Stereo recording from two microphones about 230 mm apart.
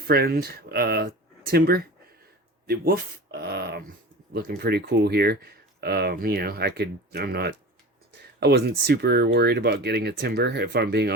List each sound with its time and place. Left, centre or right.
0.1 s speech: right